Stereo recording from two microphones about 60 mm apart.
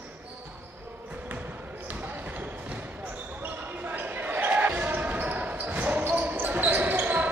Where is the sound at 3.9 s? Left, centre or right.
Right.